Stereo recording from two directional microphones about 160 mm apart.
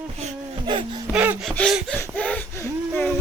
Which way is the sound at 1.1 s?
10° right (ahead or behind).